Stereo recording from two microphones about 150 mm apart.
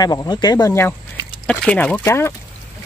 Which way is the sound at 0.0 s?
25° left (ahead or behind).